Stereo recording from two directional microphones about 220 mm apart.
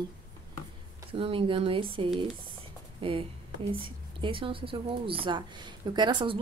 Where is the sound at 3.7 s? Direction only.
25° right (ahead or behind).